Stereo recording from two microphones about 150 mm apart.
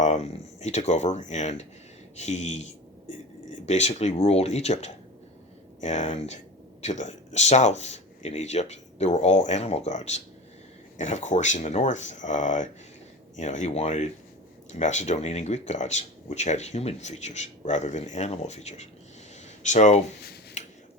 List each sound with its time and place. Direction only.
0.0 s speech: 50° left (ahead or behind)
20.6 s finger snapping: 50° left (ahead or behind)